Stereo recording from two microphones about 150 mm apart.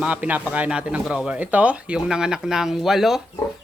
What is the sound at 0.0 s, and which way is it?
Speech, 10° right (ahead or behind).